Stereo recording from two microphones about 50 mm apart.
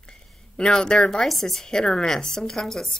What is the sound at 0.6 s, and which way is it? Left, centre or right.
Speech, centre.